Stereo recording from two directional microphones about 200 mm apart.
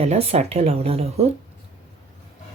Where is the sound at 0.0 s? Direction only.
30° right (ahead or behind).